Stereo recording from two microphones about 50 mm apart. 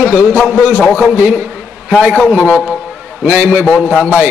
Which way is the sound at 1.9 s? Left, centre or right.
Right.